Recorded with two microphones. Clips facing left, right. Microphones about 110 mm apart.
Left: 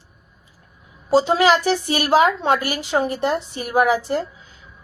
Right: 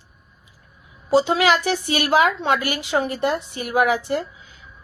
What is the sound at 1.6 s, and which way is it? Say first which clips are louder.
A woman's voice: left 2 dB; 40° left (ahead or behind).